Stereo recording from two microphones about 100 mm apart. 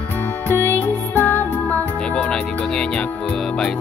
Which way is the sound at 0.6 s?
20° left (ahead or behind).